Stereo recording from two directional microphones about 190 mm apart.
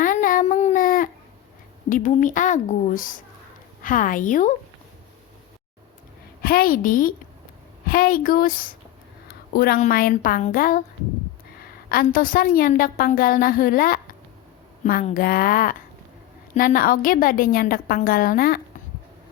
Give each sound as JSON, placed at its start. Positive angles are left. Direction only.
{"t": 0.0, "sound": "a sound", "side_deg": 45}
{"t": 1.9, "sound": "a woman's voice", "side_deg": 40}
{"t": 6.4, "sound": "a woman's voice", "side_deg": 50}
{"t": 15.1, "sound": "a woman's voice", "side_deg": 50}